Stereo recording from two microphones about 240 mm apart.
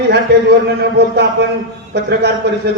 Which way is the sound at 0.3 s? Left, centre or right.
Right.